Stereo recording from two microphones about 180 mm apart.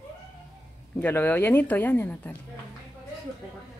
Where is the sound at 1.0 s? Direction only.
10° left (ahead or behind).